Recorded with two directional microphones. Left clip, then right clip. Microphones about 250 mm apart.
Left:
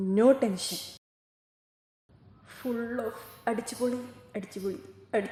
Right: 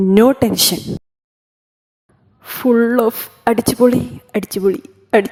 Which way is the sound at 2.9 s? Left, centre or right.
Right.